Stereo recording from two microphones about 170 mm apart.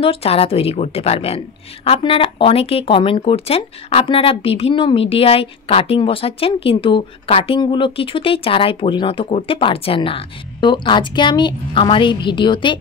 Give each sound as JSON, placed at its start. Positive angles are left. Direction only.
{"t": 0.0, "sound": "a woman's voice", "side_deg": 35}